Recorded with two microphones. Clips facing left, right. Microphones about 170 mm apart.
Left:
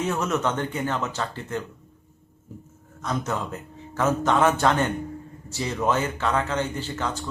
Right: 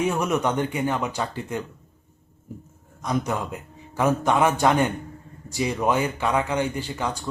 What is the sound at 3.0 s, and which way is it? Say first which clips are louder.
A man's voice: right 2 dB; 15° right (ahead or behind).